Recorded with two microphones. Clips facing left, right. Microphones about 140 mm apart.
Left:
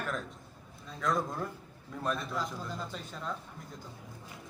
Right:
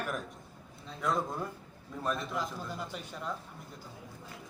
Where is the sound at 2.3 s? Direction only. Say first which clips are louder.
Even; 15° right (ahead or behind).